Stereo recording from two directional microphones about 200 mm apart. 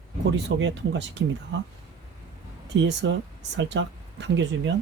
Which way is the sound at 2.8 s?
65° right (ahead or behind).